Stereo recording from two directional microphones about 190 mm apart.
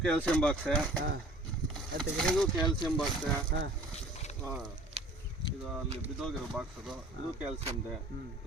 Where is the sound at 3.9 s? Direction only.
35° left (ahead or behind).